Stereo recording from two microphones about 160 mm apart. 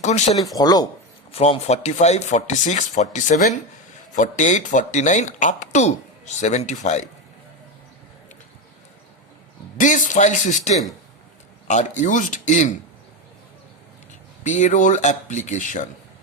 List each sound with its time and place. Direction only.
0.0 s speech: 45° left (ahead or behind)
0.3 s speech: 25° left (ahead or behind)
1.3 s speech: 40° left (ahead or behind)
9.7 s speech: 55° left (ahead or behind)
14.4 s speech: 50° left (ahead or behind)